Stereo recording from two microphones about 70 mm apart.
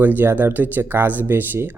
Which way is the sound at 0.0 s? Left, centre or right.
Right.